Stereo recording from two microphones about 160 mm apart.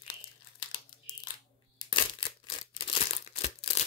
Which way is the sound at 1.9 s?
30° left (ahead or behind).